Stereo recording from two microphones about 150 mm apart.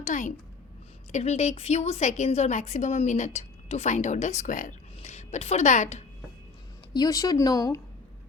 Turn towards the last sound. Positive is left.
turn(degrees=25)  # may be behind; listen again after turning